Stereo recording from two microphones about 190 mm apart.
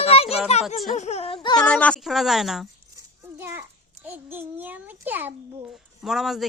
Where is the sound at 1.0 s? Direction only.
35° left (ahead or behind).